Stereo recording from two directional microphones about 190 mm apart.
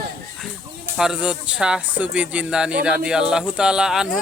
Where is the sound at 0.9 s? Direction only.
5° right (ahead or behind).